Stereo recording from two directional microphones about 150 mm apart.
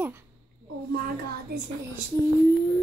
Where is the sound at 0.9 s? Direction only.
85° right.